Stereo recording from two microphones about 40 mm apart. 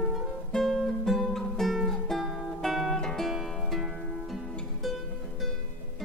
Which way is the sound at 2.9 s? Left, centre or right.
Centre.